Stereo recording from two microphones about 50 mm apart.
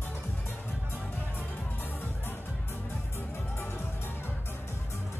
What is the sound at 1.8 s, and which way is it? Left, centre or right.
Music, left.